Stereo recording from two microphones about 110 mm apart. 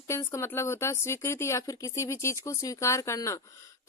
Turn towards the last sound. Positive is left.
turn(degrees=30)  # may be behind; listen again after turning